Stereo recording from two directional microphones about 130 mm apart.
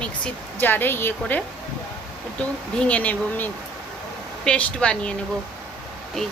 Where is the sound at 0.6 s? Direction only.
15° left (ahead or behind).